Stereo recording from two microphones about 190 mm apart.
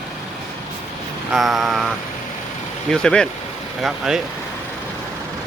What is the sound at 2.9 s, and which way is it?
Speech, 5° left (ahead or behind).